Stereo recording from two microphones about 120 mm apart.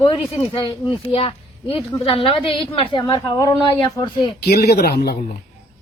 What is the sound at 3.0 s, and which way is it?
Speech, 30° left (ahead or behind).